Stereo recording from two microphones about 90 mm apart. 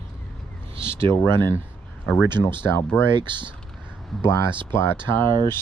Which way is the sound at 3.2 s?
60° right (ahead or behind).